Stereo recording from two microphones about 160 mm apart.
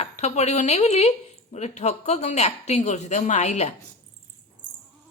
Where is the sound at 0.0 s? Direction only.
45° left (ahead or behind).